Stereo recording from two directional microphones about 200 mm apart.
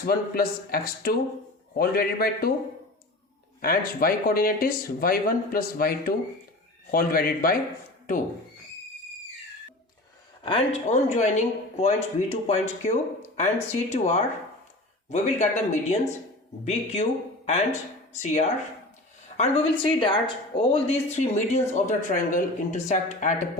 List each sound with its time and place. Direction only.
0.0 s speech: 50° left (ahead or behind)
3.6 s speech: 45° left (ahead or behind)
10.4 s speech: 25° left (ahead or behind)